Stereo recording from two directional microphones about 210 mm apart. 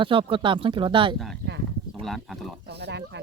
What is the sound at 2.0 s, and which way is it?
Speech, centre (ahead or behind).